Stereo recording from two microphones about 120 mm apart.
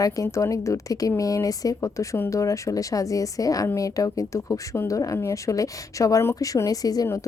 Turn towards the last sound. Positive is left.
turn(degrees=30)  # may be behind; listen again after turning